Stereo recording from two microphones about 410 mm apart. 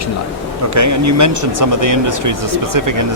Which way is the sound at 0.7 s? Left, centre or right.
Right.